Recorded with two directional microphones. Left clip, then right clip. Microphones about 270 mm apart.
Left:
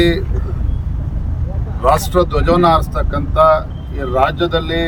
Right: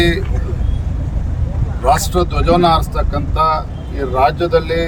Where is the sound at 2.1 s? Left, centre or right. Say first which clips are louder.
Left 1 dB; centre.